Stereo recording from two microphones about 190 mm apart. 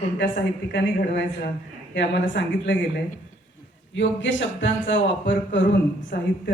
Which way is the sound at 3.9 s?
75° left (ahead or behind).